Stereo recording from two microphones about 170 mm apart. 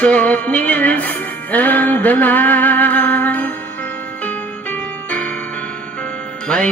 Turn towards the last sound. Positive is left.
turn(degrees=5)  # may be behind; listen again after turning